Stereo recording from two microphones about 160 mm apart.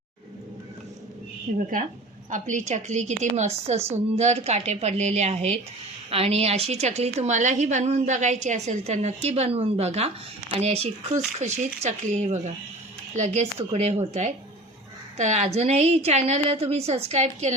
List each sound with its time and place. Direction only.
1.5 s a woman's voice: 55° right (ahead or behind)